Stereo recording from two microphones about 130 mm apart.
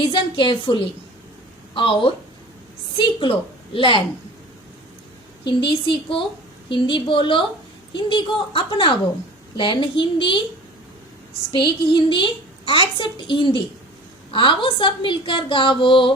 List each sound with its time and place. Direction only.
0.0 s a woman's voice: 40° left (ahead or behind)
5.5 s a woman's voice: 40° left (ahead or behind)
11.5 s a woman's voice: 40° left (ahead or behind)